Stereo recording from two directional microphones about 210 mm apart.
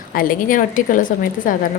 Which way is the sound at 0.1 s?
40° left (ahead or behind).